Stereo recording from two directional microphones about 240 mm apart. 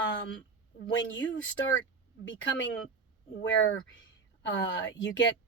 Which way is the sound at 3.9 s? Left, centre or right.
Left.